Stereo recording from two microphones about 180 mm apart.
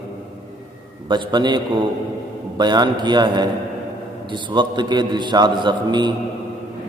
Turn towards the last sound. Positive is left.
turn(degrees=-25)  # may be behind; listen again after turning